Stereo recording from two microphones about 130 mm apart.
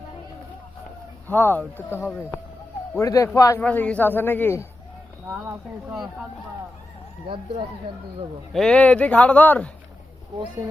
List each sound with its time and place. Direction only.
1.3 s speech: 15° left (ahead or behind)
3.6 s speech: 10° left (ahead or behind)
5.3 s speech: 15° right (ahead or behind)
8.5 s speech: 5° left (ahead or behind)